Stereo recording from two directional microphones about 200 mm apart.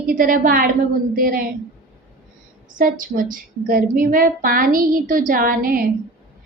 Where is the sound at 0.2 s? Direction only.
45° right (ahead or behind).